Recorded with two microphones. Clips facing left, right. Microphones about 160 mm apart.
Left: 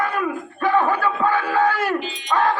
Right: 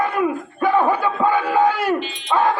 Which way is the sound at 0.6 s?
20° right (ahead or behind).